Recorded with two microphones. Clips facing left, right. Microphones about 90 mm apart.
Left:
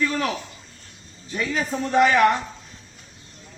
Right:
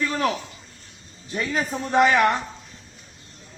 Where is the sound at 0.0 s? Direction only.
30° right (ahead or behind).